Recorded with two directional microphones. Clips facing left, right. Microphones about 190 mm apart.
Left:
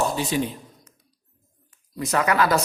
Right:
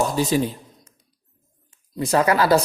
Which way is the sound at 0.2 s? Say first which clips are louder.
Right 4 dB; 40° right (ahead or behind).